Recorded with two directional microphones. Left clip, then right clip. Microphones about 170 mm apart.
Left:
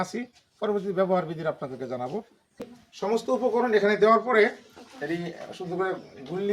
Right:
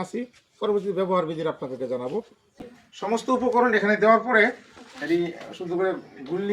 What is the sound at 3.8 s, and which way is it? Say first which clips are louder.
Speech: right 1 dB; 20° left (ahead or behind).